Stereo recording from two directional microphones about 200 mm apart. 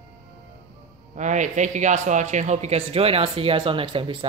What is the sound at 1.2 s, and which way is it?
Speech, 40° right (ahead or behind).